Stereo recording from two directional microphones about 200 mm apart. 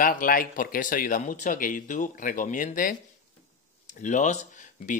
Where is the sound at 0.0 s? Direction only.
45° left (ahead or behind).